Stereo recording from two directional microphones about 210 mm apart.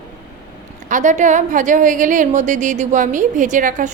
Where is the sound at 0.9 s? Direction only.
35° right (ahead or behind).